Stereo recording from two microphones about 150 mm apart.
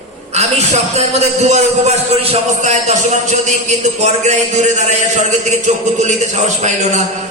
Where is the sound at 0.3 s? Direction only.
50° right (ahead or behind).